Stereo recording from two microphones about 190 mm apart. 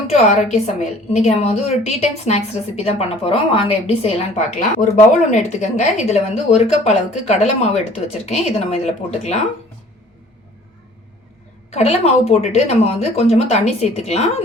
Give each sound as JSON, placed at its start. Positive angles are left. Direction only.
{"t": 0.3, "sound": "a woman's voice", "side_deg": 35}
{"t": 11.7, "sound": "a woman's voice", "side_deg": 35}